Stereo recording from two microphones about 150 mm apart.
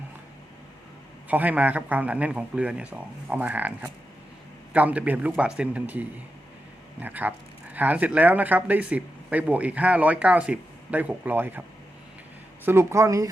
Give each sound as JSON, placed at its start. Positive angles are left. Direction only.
{"t": 1.3, "sound": "speech", "side_deg": -10}
{"t": 12.6, "sound": "speech", "side_deg": -20}